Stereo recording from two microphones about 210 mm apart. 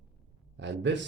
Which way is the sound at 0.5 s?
60° right (ahead or behind).